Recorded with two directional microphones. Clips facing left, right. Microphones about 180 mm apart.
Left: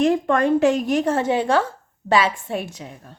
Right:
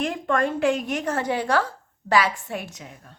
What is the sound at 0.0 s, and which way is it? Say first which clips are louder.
A woman's voice: left 6 dB; 40° left (ahead or behind).